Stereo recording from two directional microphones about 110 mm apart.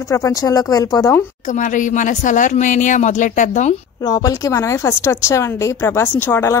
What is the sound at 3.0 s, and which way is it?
Speech, 90° left.